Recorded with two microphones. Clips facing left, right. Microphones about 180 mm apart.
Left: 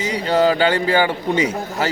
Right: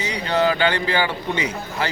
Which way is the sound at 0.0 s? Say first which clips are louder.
Left 4 dB; 45° left (ahead or behind).